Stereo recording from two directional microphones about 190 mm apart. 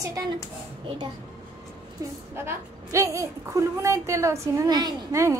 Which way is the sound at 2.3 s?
15° right (ahead or behind).